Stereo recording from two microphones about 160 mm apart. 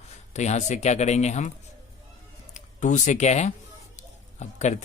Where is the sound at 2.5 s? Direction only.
50° left (ahead or behind).